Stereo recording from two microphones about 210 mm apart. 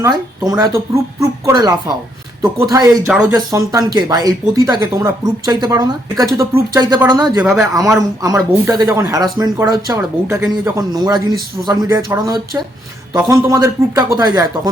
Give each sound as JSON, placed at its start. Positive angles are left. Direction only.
{"t": 0.0, "sound": "speech", "side_deg": -15}
{"t": 7.3, "sound": "speech", "side_deg": -5}
{"t": 7.9, "sound": "speech", "side_deg": -15}